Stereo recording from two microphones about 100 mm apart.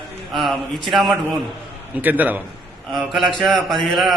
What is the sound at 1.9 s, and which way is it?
Speech, 15° right (ahead or behind).